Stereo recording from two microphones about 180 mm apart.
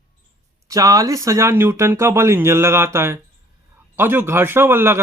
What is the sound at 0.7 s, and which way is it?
Speech, 20° right (ahead or behind).